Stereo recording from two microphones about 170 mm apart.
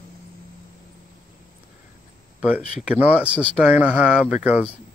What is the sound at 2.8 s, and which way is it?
Speech, 10° right (ahead or behind).